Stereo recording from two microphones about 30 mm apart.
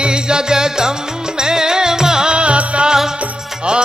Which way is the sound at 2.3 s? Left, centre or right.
Right.